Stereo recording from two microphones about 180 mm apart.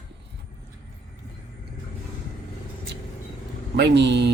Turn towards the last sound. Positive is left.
turn(degrees=-70)  # may be behind; listen again after turning